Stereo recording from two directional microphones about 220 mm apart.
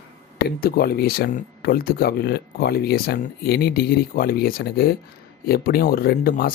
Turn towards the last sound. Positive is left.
turn(degrees=40)  # may be behind; listen again after turning